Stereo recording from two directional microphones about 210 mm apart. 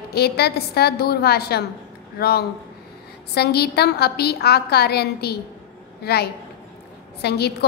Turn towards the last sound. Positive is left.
turn(degrees=50)  # may be behind; listen again after turning